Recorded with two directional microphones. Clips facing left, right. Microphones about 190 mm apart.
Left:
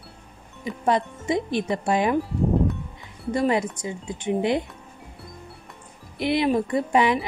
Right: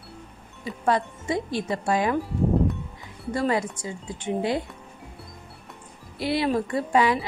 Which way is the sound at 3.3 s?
20° left (ahead or behind).